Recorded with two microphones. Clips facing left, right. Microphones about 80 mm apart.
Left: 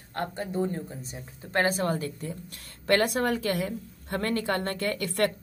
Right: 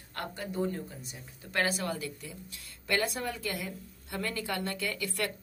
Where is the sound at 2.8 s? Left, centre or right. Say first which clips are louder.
Left 8 dB; left.